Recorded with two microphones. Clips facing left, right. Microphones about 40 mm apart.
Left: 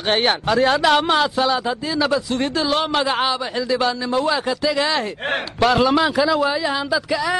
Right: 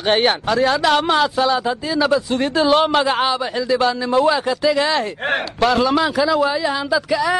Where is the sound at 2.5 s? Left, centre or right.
Centre.